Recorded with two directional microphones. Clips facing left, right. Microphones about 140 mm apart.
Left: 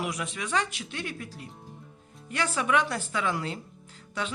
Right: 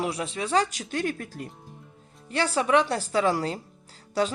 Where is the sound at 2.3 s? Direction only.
30° right (ahead or behind).